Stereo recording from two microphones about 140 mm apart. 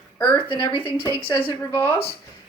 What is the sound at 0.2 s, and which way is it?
Speech, 10° left (ahead or behind).